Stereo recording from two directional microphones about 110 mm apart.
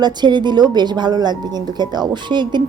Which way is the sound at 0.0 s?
45° right (ahead or behind).